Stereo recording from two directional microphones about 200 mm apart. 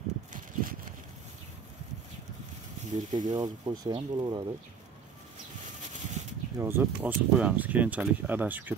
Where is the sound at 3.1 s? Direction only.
20° right (ahead or behind).